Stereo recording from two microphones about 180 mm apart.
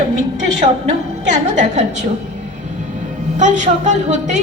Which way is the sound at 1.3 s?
40° right (ahead or behind).